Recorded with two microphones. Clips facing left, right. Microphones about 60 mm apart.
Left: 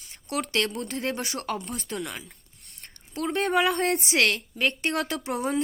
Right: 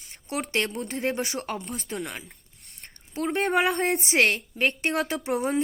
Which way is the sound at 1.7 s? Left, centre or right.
Right.